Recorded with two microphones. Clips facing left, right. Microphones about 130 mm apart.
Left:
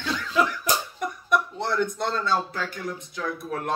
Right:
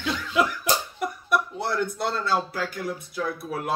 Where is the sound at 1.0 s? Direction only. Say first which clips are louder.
Even; 5° right (ahead or behind).